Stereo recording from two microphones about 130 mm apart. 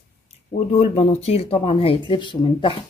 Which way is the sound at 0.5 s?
55° left (ahead or behind).